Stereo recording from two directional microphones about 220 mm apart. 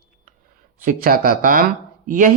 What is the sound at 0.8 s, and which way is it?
Speech, 40° right (ahead or behind).